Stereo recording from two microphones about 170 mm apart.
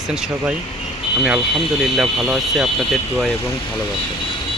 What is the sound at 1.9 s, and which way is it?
Speech, centre (ahead or behind).